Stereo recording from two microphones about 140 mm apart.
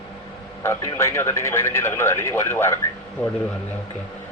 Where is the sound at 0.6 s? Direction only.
20° left (ahead or behind).